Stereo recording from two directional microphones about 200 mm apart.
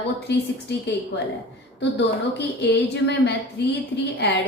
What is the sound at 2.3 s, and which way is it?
Speech, 60° left (ahead or behind).